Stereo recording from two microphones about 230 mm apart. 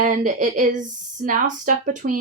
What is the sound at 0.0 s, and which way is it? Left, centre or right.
Speech, right.